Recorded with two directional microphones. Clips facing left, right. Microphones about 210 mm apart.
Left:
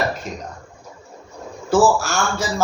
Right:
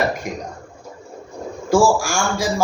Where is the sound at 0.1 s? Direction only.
15° right (ahead or behind).